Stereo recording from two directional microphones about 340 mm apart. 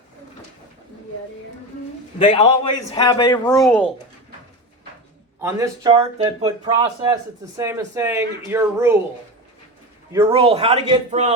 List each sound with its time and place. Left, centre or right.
2.1 s a man's voice: centre
3.5 s speech: centre
5.4 s speech: centre
10.1 s speech: centre